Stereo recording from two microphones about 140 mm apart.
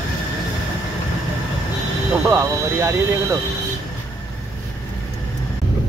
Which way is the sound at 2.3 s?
20° right (ahead or behind).